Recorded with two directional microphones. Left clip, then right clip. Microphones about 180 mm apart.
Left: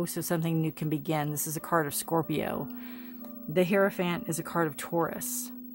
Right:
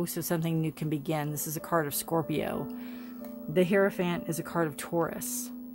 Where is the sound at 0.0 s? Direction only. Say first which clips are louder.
Left 1 dB; 20° left (ahead or behind).